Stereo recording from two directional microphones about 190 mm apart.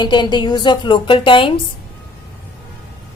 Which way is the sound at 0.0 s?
25° left (ahead or behind).